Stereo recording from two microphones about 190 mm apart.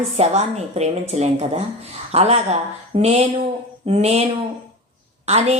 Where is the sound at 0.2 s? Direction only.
35° right (ahead or behind).